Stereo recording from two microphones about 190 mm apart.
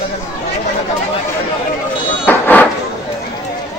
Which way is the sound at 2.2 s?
10° left (ahead or behind).